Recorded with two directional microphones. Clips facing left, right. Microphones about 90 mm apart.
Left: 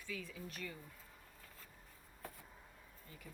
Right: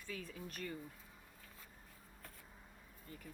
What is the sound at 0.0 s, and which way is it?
Speech, 40° right (ahead or behind).